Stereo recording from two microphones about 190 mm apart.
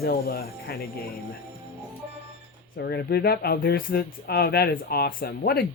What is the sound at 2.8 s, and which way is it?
Speech, 60° left (ahead or behind).